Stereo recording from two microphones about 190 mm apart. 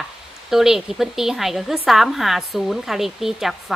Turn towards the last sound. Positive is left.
turn(degrees=0)  # may be behind; listen again after turning